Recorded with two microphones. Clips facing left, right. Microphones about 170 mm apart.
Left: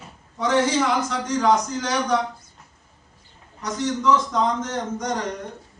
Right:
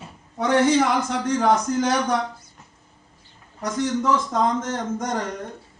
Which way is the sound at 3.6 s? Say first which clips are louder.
Right 2 dB; 50° right (ahead or behind).